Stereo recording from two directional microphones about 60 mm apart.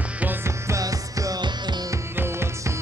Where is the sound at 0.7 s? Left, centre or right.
Right.